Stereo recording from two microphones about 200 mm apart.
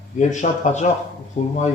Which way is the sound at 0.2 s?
40° left (ahead or behind).